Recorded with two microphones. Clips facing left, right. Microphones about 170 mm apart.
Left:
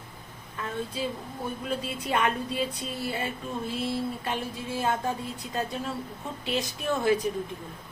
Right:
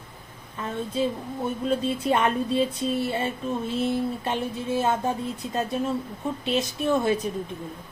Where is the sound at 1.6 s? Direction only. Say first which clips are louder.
Right 8 dB; 25° right (ahead or behind).